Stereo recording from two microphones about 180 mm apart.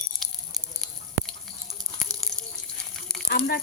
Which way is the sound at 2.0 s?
Centre (ahead or behind).